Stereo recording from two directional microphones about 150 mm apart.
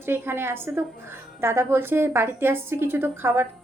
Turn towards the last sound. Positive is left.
turn(degrees=-15)  # may be behind; listen again after turning